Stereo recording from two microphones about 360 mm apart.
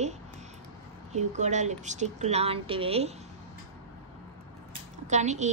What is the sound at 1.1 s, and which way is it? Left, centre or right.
A woman's voice, centre.